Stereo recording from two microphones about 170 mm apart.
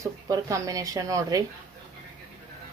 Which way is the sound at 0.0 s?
20° right (ahead or behind).